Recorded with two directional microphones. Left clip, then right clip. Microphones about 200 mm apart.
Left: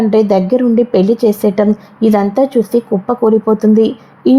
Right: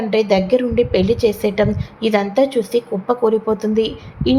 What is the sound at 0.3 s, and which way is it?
A woman's voice, 35° left (ahead or behind).